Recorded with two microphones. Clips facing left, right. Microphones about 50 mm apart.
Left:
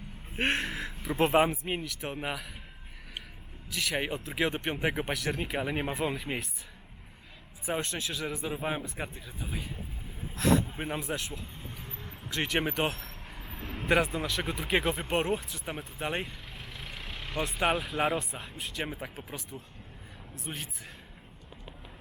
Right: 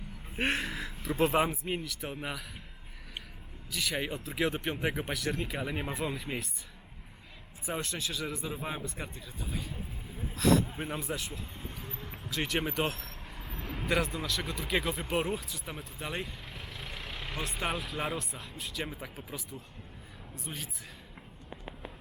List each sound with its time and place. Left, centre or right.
0.3 s speech: centre
3.7 s speech: centre
5.9 s speech: centre
7.8 s speech: centre
10.2 s a sound: centre
10.8 s speech: centre
11.0 s speech: centre
11.8 s vehicle: centre
13.9 s speech: centre
16.0 s speech: centre
16.2 s vehicle: centre
17.7 s speech: centre